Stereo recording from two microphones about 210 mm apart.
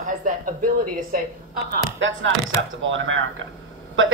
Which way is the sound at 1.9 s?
60° right (ahead or behind).